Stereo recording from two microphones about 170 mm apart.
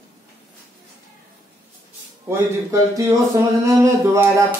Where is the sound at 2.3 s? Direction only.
20° right (ahead or behind).